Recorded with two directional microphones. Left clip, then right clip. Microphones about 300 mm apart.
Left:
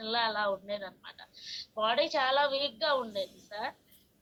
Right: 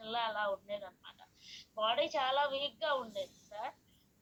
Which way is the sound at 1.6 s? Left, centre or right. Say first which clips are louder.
Left 4 dB; left.